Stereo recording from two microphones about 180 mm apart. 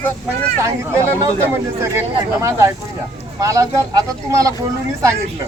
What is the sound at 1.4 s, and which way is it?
Speech, 15° right (ahead or behind).